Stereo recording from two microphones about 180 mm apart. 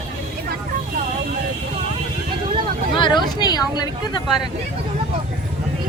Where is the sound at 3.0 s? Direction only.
25° left (ahead or behind).